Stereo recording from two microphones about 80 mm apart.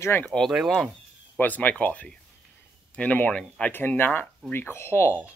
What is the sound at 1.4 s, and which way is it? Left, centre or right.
Speech, left.